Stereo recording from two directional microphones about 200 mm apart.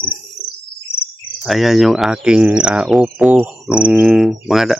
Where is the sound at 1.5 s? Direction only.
Centre (ahead or behind).